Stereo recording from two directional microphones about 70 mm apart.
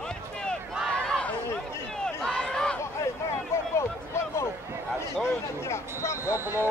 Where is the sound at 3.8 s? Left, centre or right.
Left.